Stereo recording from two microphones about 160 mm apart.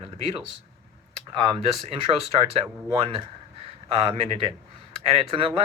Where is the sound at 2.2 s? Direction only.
35° right (ahead or behind).